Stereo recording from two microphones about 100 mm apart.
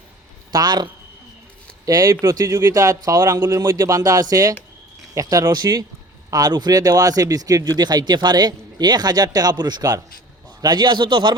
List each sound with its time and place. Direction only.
0.5 s a man's voice: 45° right (ahead or behind)